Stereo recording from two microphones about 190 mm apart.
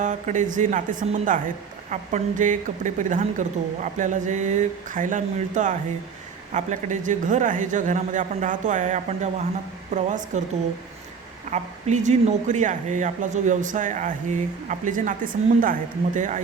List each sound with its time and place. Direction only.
0.0 s speech: 40° right (ahead or behind)